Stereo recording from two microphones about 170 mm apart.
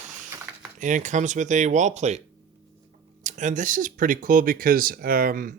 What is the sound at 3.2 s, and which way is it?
Speech, 45° right (ahead or behind).